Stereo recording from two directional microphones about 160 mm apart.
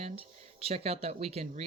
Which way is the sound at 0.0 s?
35° right (ahead or behind).